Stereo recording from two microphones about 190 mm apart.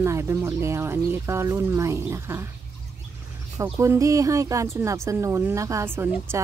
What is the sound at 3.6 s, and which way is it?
Speech, 15° right (ahead or behind).